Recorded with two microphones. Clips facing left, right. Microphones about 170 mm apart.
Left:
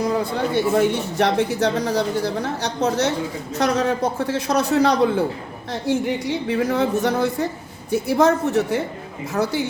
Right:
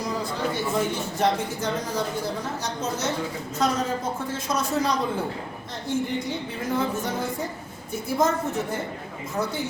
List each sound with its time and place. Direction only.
0.0 s speech: 60° left (ahead or behind)